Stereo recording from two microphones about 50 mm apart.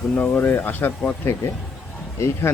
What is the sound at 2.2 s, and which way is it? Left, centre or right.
Speech, left.